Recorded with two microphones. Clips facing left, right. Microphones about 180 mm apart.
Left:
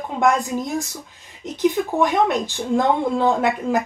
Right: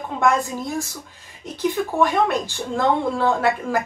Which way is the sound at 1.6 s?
20° left (ahead or behind).